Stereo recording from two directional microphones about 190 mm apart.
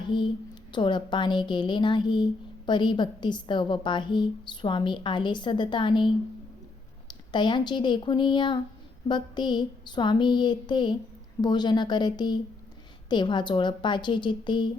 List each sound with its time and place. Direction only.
0.0 s a woman's voice: 25° left (ahead or behind)
7.1 s a woman's voice: 25° left (ahead or behind)